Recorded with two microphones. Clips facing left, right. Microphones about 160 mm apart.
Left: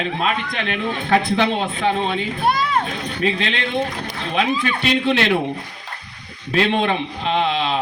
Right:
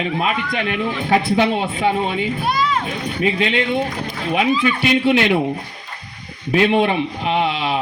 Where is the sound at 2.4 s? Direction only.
55° left (ahead or behind).